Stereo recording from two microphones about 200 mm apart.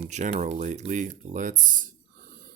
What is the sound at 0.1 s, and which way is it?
Speech, 35° right (ahead or behind).